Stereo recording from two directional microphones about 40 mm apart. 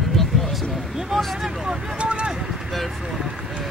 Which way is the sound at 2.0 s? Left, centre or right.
Right.